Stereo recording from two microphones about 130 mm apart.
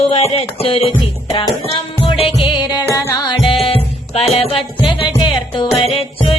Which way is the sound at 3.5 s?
50° left (ahead or behind).